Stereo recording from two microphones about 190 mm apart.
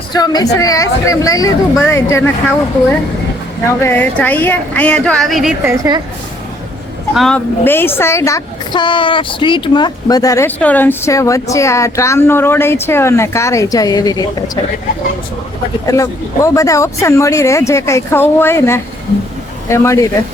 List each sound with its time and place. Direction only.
0.1 s speech: 20° left (ahead or behind)
3.8 s speech: 10° left (ahead or behind)
5.6 s a woman's voice: 15° right (ahead or behind)
7.1 s speech: centre (ahead or behind); by 14.6 s 20° left (ahead or behind)
15.9 s speech: 15° left (ahead or behind)